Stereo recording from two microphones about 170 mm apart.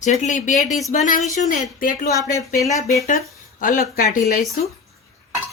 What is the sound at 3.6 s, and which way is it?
Speech, 50° left (ahead or behind).